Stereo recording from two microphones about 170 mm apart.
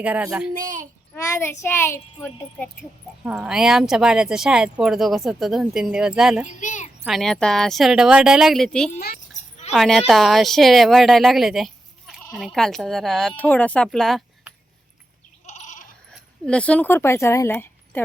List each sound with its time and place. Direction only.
0.0 s a child's voice: 10° right (ahead or behind)
0.5 s speech: 50° right (ahead or behind)
1.1 s a woman's voice: 15° left (ahead or behind)
3.2 s speech: 5° right (ahead or behind)
6.6 s a sound: 45° left (ahead or behind)
7.0 s speech: centre (ahead or behind)
9.0 s a child's voice: 70° left (ahead or behind)
9.7 s speech: centre (ahead or behind)
15.4 s bleat: 45° left (ahead or behind)
16.5 s a woman's voice: 5° left (ahead or behind)